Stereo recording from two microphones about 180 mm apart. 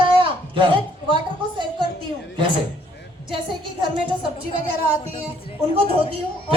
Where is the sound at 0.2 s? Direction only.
30° right (ahead or behind).